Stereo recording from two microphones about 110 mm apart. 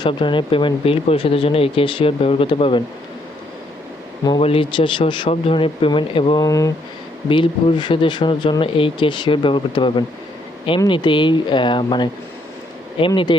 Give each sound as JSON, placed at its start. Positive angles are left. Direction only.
{"t": 0.1, "sound": "speech", "side_deg": 50}
{"t": 4.4, "sound": "speech", "side_deg": 60}
{"t": 6.4, "sound": "speech", "side_deg": 30}
{"t": 7.3, "sound": "speech", "side_deg": 45}